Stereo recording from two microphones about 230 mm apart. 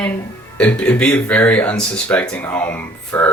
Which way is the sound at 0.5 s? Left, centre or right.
Centre.